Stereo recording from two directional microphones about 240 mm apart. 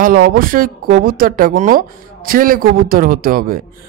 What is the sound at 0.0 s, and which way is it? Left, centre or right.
A man's voice, right.